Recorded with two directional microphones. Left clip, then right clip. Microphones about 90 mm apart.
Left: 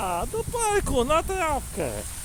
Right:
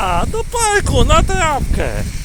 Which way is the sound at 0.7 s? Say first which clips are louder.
Right 8 dB; centre (ahead or behind).